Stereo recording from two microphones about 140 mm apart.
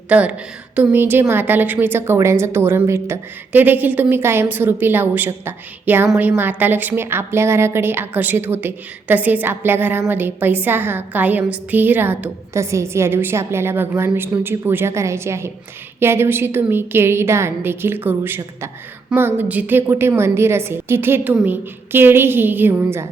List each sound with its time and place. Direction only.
0.1 s a woman's voice: 10° right (ahead or behind)